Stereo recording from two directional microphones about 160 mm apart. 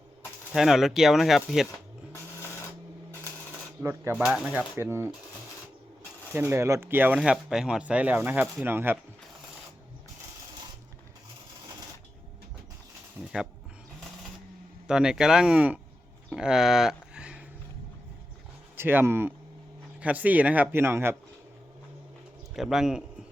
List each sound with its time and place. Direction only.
0.5 s speech: centre (ahead or behind)
2.1 s sewing machine: 15° left (ahead or behind)
3.8 s speech: 15° right (ahead or behind)
6.3 s speech: 15° right (ahead or behind)
13.2 s speech: 5° right (ahead or behind)
14.8 s speech: 5° right (ahead or behind)
18.8 s speech: 15° right (ahead or behind)
22.5 s speech: centre (ahead or behind)